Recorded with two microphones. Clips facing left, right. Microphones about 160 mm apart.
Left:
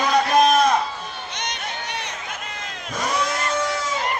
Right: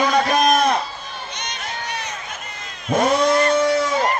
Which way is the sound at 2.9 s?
60° right (ahead or behind).